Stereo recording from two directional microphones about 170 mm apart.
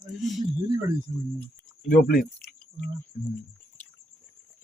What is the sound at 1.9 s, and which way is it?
Speech, 60° left (ahead or behind).